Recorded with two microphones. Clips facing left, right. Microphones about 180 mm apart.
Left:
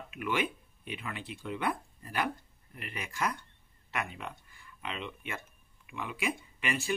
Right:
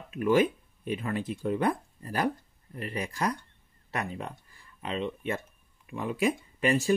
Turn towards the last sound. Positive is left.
turn(degrees=-40)  # may be behind; listen again after turning